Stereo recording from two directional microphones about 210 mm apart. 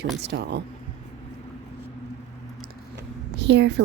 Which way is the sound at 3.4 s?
55° right (ahead or behind).